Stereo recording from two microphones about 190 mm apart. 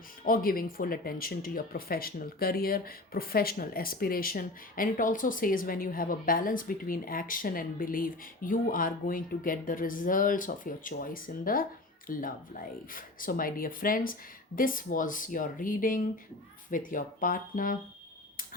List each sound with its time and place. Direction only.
0.3 s speech: 50° left (ahead or behind)